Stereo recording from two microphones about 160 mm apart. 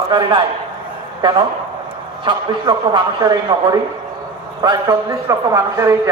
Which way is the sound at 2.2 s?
30° right (ahead or behind).